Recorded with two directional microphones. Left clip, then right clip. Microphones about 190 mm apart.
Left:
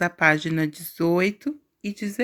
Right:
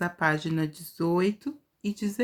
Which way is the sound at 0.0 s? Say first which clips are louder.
Left 7 dB; 30° left (ahead or behind).